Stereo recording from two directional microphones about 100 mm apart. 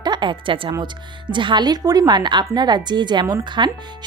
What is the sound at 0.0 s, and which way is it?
A woman's voice, 50° right (ahead or behind).